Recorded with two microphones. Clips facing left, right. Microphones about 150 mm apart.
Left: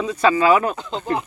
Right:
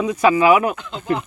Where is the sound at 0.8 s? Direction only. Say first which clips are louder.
Left 4 dB; 35° left (ahead or behind).